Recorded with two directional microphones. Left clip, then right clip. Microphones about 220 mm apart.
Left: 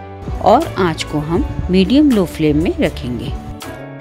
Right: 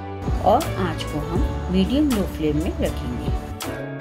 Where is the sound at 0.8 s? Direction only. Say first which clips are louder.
Left 8 dB; 45° left (ahead or behind).